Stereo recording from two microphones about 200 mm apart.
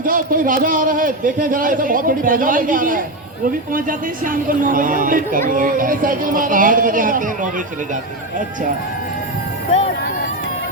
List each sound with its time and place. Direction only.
0.0 s a man's voice: 45° right (ahead or behind)